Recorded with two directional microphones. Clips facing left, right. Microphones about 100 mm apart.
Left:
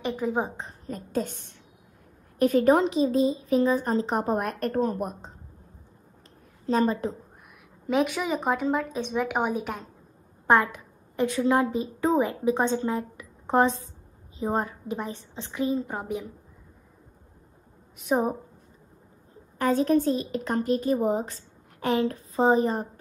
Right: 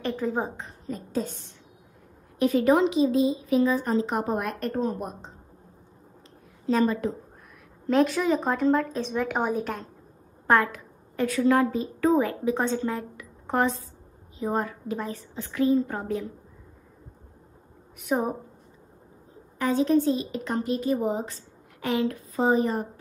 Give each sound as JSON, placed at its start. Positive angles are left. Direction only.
{"t": 0.0, "sound": "a woman's voice", "side_deg": 10}
{"t": 0.8, "sound": "a woman's voice", "side_deg": 50}
{"t": 6.6, "sound": "a woman's voice", "side_deg": 35}
{"t": 7.8, "sound": "a woman's voice", "side_deg": 5}
{"t": 10.4, "sound": "a woman's voice", "side_deg": 20}
{"t": 18.0, "sound": "a woman's voice", "side_deg": 20}
{"t": 19.6, "sound": "a woman's voice", "side_deg": 45}